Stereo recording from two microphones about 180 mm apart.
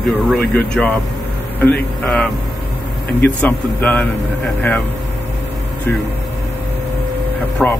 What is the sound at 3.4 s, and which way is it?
Speech, 10° left (ahead or behind).